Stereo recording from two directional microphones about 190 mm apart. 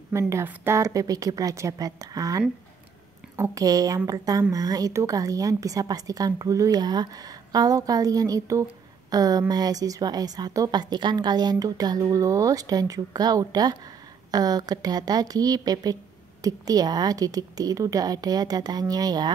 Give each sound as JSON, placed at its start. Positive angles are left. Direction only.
{"t": 0.1, "sound": "a woman's voice", "side_deg": -15}